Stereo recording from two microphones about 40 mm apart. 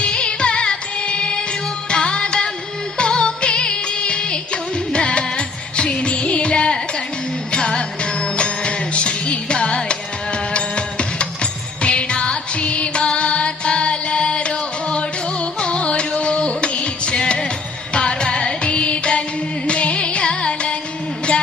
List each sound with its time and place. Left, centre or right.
0.0 s music: left